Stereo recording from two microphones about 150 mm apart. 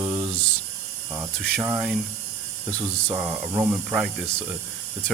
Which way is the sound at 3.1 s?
5° right (ahead or behind).